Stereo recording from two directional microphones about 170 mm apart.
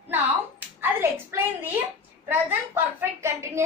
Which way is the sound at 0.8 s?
15° right (ahead or behind).